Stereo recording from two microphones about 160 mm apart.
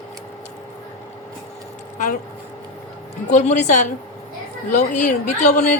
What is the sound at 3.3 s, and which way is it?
A woman's voice, 45° left (ahead or behind).